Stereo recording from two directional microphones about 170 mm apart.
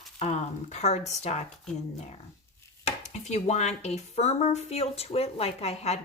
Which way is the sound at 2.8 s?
40° left (ahead or behind).